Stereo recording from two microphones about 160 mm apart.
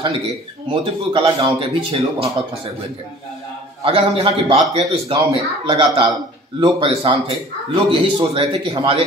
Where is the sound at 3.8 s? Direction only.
35° right (ahead or behind).